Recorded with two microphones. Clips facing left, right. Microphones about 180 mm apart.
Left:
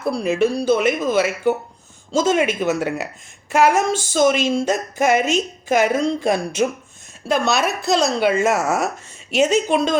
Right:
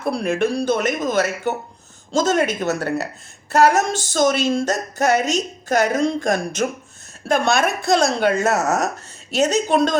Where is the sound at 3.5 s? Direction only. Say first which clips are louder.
Right 1 dB; 40° right (ahead or behind).